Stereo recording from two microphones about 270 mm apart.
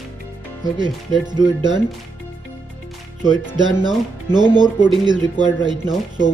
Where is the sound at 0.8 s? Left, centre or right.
Centre.